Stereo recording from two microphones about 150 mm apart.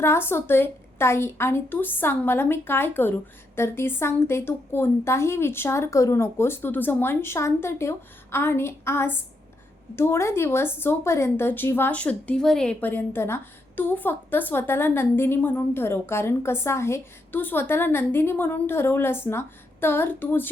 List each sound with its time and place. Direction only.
0.0 s speech: 15° left (ahead or behind)